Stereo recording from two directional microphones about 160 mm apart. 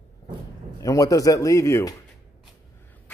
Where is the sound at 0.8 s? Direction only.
20° left (ahead or behind).